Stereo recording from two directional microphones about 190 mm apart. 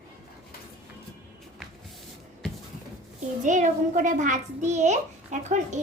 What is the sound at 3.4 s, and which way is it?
A child's voice, 40° right (ahead or behind).